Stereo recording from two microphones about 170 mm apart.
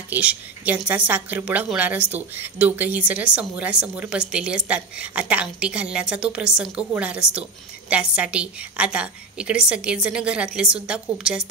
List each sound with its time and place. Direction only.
0.1 s speech: 10° right (ahead or behind)